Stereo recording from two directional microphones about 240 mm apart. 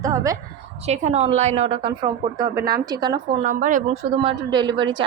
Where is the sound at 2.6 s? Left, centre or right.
Right.